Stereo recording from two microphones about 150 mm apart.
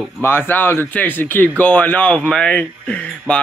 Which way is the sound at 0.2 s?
15° left (ahead or behind).